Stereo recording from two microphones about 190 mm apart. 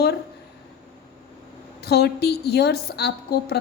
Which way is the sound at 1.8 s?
60° left (ahead or behind).